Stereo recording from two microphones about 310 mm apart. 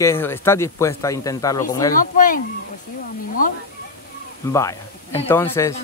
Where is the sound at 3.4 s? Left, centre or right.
Left.